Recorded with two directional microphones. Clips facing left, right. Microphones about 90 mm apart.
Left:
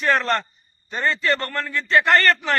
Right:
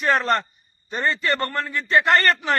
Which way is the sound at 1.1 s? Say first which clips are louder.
Left 1 dB; 20° right (ahead or behind).